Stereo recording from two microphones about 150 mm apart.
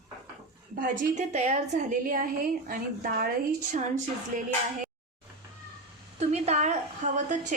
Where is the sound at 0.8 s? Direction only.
60° right (ahead or behind).